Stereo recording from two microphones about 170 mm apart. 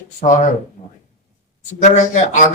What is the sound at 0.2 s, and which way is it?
Speech, 40° left (ahead or behind).